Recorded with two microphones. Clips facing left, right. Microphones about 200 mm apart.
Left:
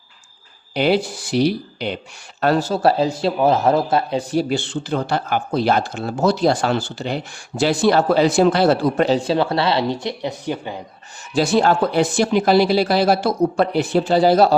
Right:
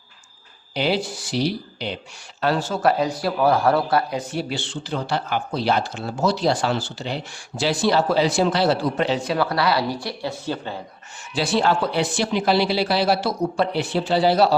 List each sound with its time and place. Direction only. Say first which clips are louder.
0.7 s speech: left 5 dB; 55° left (ahead or behind)
2.4 s a man's voice: left 4 dB; 45° left (ahead or behind)
9.1 s speech: left 4 dB; 30° left (ahead or behind)
11.3 s a man's voice: left 4 dB; 45° left (ahead or behind)